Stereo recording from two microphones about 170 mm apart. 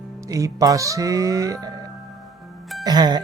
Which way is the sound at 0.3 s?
20° right (ahead or behind).